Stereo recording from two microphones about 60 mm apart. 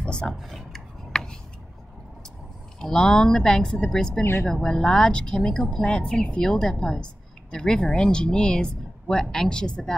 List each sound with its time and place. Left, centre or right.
0.0 s a sound: centre
0.3 s speech: centre
1.1 s tick-tock: centre
2.8 s a woman's voice: centre
4.2 s speech: left
4.5 s a woman's voice: centre